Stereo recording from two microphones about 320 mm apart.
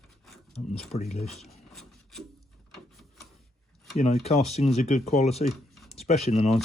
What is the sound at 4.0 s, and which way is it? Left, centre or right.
Speech, centre.